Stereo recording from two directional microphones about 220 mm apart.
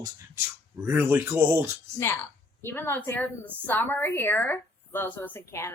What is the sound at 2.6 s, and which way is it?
A woman's voice, 10° left (ahead or behind).